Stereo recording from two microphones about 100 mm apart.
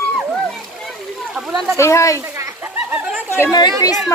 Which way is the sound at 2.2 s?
25° right (ahead or behind).